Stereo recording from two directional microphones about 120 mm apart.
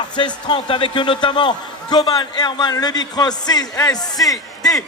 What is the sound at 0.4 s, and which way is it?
A man's voice, 40° left (ahead or behind).